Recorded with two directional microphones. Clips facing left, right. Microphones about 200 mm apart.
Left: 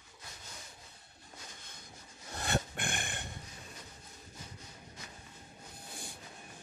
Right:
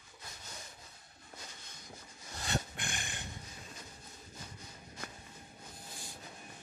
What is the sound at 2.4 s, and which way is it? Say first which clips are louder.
Dog: left 3 dB; 55° left (ahead or behind).